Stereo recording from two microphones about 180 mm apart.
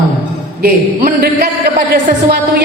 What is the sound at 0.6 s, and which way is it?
A man's voice, 55° right (ahead or behind).